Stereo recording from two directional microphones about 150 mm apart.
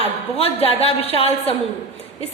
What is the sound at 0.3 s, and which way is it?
A woman's voice, 40° left (ahead or behind).